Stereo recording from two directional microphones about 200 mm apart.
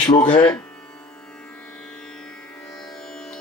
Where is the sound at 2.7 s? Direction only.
Centre (ahead or behind).